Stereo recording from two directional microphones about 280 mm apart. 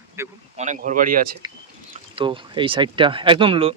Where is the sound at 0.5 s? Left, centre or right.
Right.